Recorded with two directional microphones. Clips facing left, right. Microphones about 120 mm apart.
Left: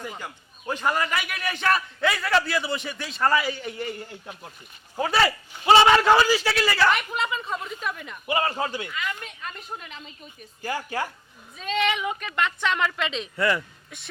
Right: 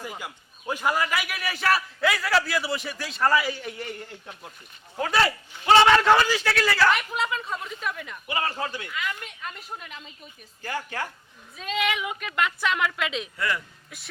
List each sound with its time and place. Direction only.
0.0 s a man's voice: 10° right (ahead or behind)
4.9 s a man's voice: 5° left (ahead or behind)
8.3 s a man's voice: 20° left (ahead or behind)
8.9 s a man's voice: centre (ahead or behind)
10.6 s speech: 10° left (ahead or behind)
11.5 s a man's voice: 5° right (ahead or behind)